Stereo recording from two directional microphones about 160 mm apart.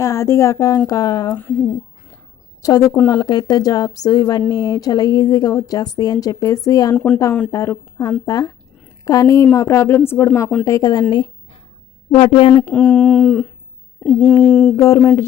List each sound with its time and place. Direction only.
0.0 s a woman's voice: 20° left (ahead or behind)
2.6 s a woman's voice: 20° left (ahead or behind)
6.9 s a woman's voice: 5° left (ahead or behind)
7.5 s a woman's voice: 20° left (ahead or behind)
12.1 s a woman's voice: 35° left (ahead or behind)
12.6 s speech: 5° left (ahead or behind)
14.8 s a woman's voice: 20° left (ahead or behind)